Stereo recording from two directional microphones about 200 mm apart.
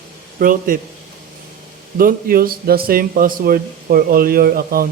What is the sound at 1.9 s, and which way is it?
A man's voice, 45° right (ahead or behind).